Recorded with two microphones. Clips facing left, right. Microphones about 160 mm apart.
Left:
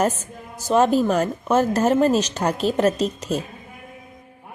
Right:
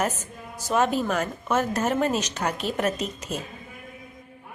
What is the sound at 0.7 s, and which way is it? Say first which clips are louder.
A woman's voice: left 6 dB; 30° left (ahead or behind).